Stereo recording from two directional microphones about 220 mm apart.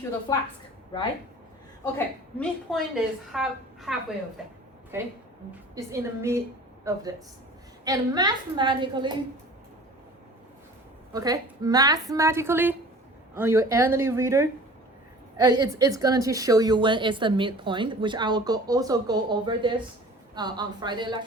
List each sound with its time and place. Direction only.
1.8 s a woman's voice: 5° left (ahead or behind)
4.9 s a woman's voice: 10° right (ahead or behind)
11.1 s a woman's voice: 15° right (ahead or behind)